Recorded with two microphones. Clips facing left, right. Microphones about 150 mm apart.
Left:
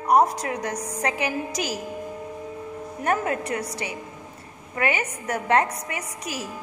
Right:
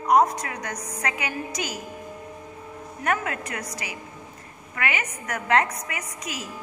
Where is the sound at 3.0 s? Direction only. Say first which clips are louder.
Left 3 dB; 35° left (ahead or behind).